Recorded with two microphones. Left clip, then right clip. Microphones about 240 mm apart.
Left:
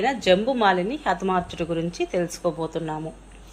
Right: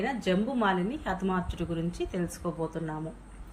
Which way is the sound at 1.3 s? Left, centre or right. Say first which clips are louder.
Left 8 dB; centre.